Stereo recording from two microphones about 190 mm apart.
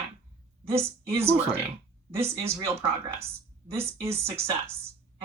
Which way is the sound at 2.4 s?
15° right (ahead or behind).